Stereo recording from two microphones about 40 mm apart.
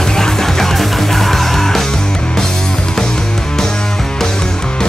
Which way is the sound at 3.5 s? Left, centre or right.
Centre.